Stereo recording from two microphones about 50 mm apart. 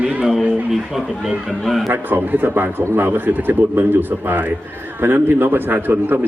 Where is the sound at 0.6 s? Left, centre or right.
Centre.